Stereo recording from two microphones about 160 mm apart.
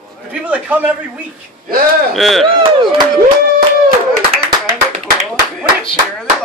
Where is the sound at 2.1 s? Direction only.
Centre (ahead or behind).